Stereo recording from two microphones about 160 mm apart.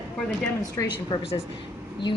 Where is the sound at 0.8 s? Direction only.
20° left (ahead or behind).